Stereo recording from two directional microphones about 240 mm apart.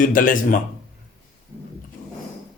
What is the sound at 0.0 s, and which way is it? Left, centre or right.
Speech, left.